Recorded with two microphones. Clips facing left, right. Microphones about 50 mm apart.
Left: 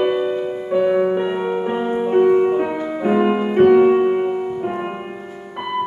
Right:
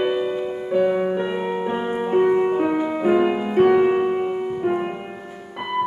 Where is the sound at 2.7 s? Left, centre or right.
Centre.